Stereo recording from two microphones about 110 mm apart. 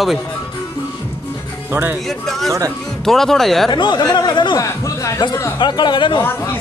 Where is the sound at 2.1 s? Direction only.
Centre (ahead or behind).